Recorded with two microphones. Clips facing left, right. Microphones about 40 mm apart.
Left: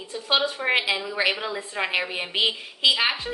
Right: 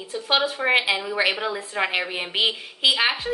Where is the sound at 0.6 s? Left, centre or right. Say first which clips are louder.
Right 2 dB; centre.